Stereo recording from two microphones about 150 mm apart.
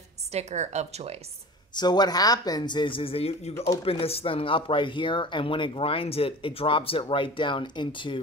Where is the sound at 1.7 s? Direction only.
30° left (ahead or behind).